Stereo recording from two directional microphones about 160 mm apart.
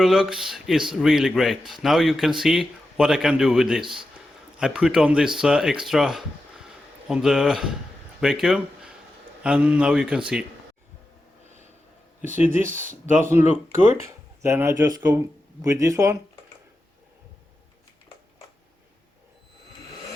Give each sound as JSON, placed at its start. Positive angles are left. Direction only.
{"t": 0.0, "sound": "a man's voice", "side_deg": 0}
{"t": 12.5, "sound": "a man's voice", "side_deg": -15}
{"t": 12.8, "sound": "speech", "side_deg": -55}
{"t": 13.5, "sound": "speech", "side_deg": 45}
{"t": 14.4, "sound": "a man's voice", "side_deg": -15}